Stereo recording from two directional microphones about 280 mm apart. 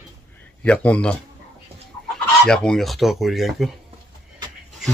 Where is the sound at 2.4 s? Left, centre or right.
Centre.